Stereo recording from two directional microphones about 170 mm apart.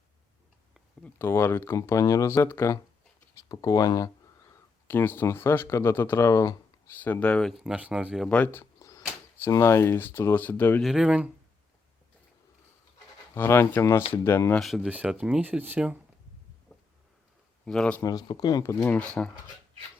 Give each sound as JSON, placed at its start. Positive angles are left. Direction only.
{"t": 1.2, "sound": "speech", "side_deg": 15}
{"t": 10.8, "sound": "speech", "side_deg": -5}
{"t": 13.3, "sound": "speech", "side_deg": 15}
{"t": 14.6, "sound": "speech", "side_deg": 0}
{"t": 17.7, "sound": "speech", "side_deg": 5}
{"t": 18.0, "sound": "speech", "side_deg": 20}